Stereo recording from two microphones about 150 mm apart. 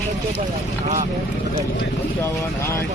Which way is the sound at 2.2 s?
20° left (ahead or behind).